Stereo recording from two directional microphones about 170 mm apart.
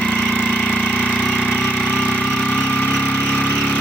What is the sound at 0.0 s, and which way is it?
Engine, 5° left (ahead or behind).